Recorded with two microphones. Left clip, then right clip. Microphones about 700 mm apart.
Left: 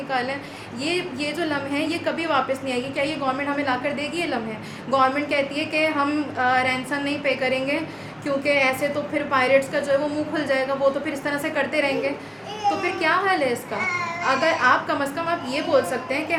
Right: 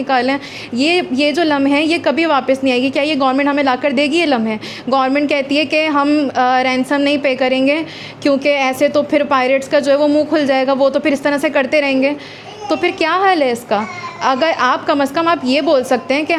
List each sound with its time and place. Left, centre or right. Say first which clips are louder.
0.1 s a woman's voice: right 10 dB; right